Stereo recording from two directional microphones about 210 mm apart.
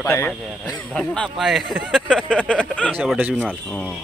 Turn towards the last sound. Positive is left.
turn(degrees=5)  # may be behind; listen again after turning